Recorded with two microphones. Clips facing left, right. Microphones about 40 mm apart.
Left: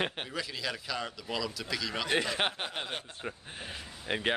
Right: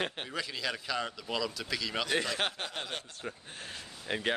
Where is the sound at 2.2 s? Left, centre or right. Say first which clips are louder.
Left 2 dB; centre.